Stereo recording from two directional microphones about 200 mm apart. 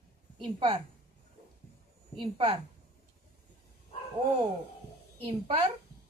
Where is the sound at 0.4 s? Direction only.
25° right (ahead or behind).